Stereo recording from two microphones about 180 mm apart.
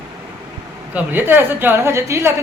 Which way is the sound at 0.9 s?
10° right (ahead or behind).